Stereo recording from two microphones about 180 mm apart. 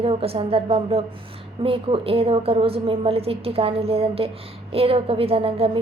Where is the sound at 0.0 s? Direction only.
30° right (ahead or behind).